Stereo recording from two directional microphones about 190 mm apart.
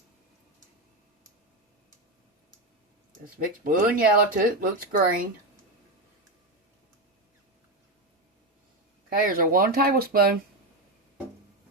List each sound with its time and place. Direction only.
3.2 s speech: 50° right (ahead or behind)
9.0 s speech: 50° right (ahead or behind)